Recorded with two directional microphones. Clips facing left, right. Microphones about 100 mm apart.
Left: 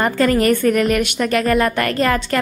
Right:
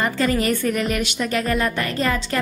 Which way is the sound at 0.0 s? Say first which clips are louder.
Left 5 dB; 55° left (ahead or behind).